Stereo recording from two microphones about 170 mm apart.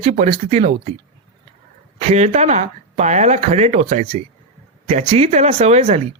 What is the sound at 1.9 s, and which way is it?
A woman's voice, 40° right (ahead or behind).